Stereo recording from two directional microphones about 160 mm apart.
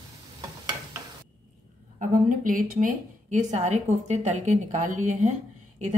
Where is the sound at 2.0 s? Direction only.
55° right (ahead or behind).